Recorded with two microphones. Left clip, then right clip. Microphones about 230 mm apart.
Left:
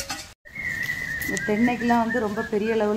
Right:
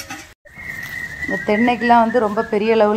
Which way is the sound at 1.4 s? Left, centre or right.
Centre.